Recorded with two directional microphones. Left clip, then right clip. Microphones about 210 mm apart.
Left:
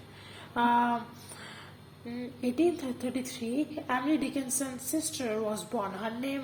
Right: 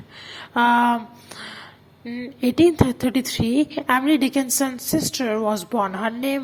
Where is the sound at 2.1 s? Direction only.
30° right (ahead or behind).